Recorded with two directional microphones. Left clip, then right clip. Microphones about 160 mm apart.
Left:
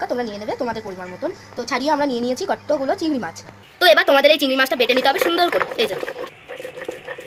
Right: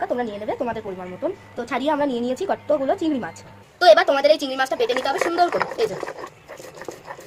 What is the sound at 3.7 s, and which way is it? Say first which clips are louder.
A woman's voice: left 1 dB; 10° left (ahead or behind).